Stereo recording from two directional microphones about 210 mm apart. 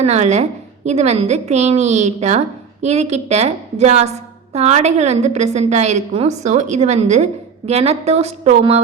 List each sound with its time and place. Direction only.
0.0 s a woman's voice: 35° right (ahead or behind)